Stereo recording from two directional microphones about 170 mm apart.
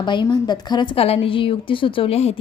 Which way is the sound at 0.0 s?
25° left (ahead or behind).